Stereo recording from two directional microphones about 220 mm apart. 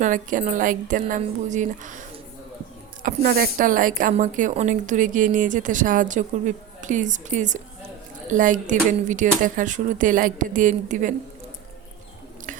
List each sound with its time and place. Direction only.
0.0 s a woman's voice: 35° right (ahead or behind)